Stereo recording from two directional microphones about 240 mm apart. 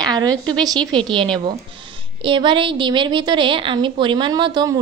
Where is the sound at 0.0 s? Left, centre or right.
Centre.